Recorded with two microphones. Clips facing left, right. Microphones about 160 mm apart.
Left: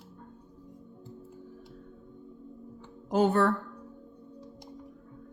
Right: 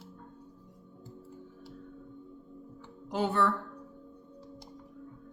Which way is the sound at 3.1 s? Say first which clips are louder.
Left 5 dB; 45° left (ahead or behind).